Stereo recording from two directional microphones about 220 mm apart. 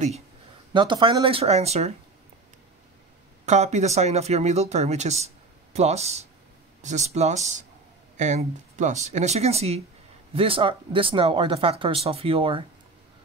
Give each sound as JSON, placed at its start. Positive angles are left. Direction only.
{"t": 0.7, "sound": "speech", "side_deg": -20}
{"t": 3.4, "sound": "speech", "side_deg": -30}